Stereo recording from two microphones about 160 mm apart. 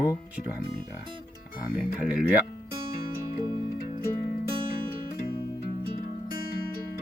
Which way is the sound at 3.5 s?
25° right (ahead or behind).